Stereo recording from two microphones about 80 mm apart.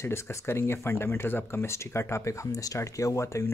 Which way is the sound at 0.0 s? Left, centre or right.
Left.